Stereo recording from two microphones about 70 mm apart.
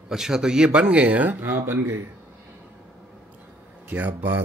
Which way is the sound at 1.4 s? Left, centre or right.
Right.